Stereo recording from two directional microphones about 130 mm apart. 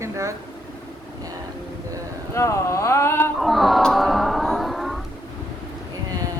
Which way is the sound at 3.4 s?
Centre (ahead or behind).